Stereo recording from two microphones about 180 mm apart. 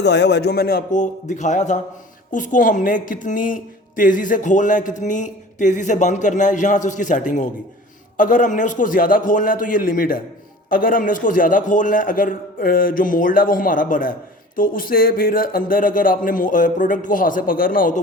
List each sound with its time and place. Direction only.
0.0 s a man's voice: 70° left (ahead or behind); by 18.0 s 50° left (ahead or behind)